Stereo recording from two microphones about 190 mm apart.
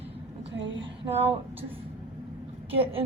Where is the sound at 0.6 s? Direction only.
75° right (ahead or behind).